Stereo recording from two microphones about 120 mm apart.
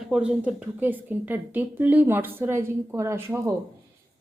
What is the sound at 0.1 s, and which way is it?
A woman's voice, 10° right (ahead or behind).